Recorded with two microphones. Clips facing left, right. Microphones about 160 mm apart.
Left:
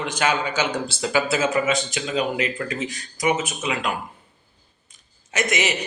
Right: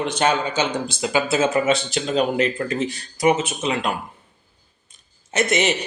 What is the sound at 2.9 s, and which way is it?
Speech, 30° right (ahead or behind).